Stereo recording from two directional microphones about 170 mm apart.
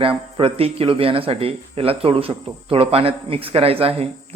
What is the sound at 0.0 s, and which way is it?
Speech, 30° right (ahead or behind).